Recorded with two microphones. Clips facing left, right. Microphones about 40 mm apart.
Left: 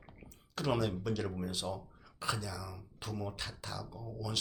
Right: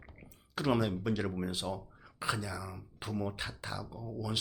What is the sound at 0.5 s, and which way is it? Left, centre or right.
Speech, centre.